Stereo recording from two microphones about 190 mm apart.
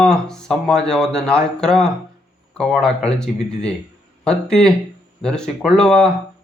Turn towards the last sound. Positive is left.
turn(degrees=5)  # may be behind; listen again after turning